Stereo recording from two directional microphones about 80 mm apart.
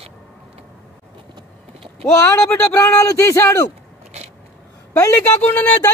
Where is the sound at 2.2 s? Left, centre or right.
Left.